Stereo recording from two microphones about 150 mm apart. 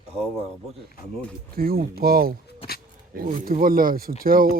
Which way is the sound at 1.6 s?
80° right.